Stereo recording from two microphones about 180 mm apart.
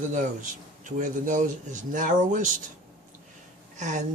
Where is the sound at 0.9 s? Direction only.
45° right (ahead or behind).